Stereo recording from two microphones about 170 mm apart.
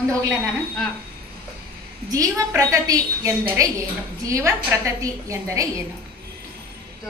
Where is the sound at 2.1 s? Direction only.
20° right (ahead or behind).